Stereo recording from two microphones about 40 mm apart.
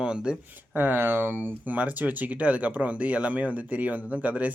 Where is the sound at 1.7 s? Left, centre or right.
Right.